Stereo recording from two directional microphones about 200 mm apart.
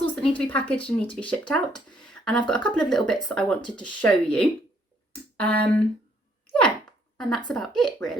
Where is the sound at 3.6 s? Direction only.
25° left (ahead or behind).